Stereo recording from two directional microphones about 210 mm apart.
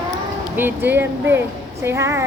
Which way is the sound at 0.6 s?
10° right (ahead or behind).